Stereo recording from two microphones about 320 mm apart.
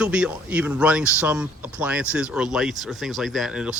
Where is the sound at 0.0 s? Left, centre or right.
Centre.